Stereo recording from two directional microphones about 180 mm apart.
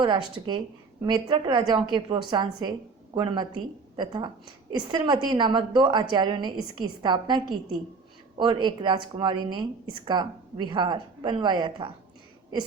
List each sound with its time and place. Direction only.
0.0 s a woman's voice: 25° right (ahead or behind)